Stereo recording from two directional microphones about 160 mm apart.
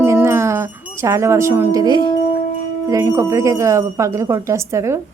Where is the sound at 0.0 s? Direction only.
15° right (ahead or behind).